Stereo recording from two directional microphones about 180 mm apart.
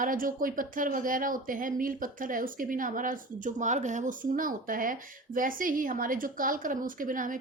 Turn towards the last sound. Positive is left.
turn(degrees=-50)  # may be behind; listen again after turning